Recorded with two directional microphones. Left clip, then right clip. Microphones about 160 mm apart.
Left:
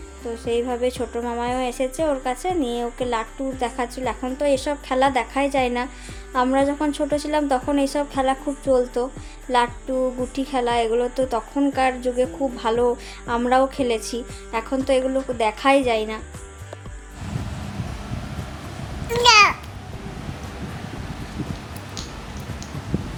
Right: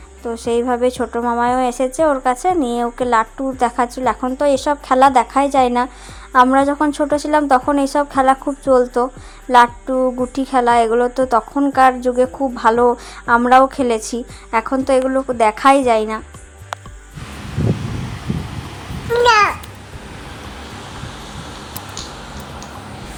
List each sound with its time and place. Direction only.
0.4 s a woman's voice: 25° right (ahead or behind)
19.2 s babbling: 55° left (ahead or behind)